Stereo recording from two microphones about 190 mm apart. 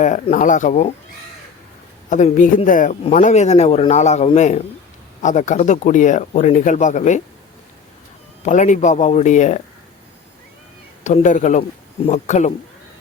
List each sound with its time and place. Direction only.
0.0 s speech: 40° left (ahead or behind)
2.0 s a man's voice: 40° left (ahead or behind)
8.4 s speech: 40° left (ahead or behind)
11.0 s speech: 40° left (ahead or behind)